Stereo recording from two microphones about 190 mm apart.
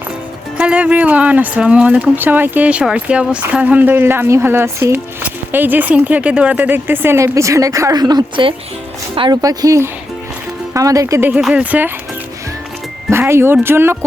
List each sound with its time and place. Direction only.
0.5 s speech: 5° right (ahead or behind)
13.1 s speech: 15° right (ahead or behind)